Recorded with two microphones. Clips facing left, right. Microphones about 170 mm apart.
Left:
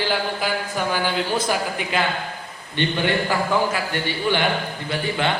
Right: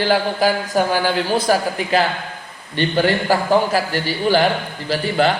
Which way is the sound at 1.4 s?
35° right (ahead or behind).